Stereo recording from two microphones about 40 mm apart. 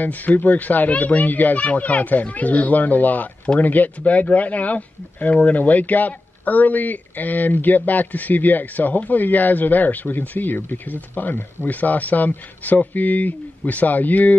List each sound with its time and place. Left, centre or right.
0.0 s speech: left